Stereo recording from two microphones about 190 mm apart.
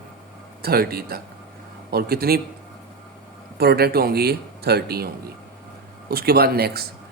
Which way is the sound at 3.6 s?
55° right (ahead or behind).